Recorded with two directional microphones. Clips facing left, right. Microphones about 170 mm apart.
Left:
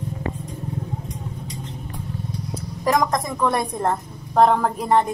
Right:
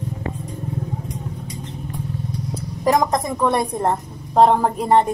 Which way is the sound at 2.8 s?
30° right (ahead or behind).